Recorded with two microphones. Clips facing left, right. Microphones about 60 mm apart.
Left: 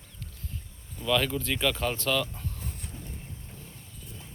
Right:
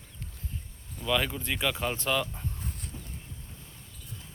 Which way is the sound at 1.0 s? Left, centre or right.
Centre.